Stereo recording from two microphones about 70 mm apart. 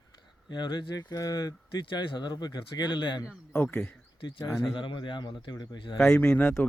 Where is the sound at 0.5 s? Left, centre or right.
Left.